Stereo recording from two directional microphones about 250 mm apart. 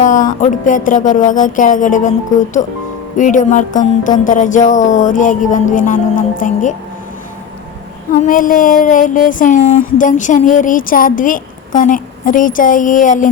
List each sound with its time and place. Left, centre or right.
0.0 s speech: left
8.1 s speech: left